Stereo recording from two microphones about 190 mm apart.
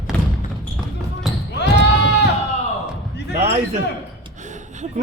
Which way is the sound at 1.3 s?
Centre (ahead or behind).